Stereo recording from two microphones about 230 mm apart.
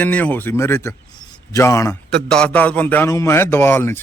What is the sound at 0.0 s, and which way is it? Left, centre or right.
A man's voice, centre.